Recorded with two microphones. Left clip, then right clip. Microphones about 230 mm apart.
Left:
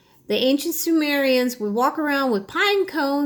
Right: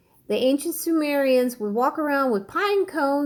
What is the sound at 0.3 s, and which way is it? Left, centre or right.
Speech, left.